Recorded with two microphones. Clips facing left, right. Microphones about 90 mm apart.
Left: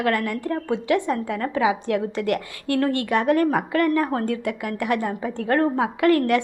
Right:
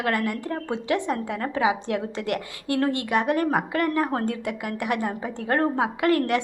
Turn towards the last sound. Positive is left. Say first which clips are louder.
# left 3 dB
turn(degrees=-25)  # may be behind; listen again after turning